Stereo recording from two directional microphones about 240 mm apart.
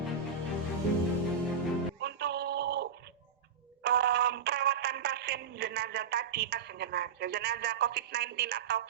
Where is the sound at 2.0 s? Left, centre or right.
Right.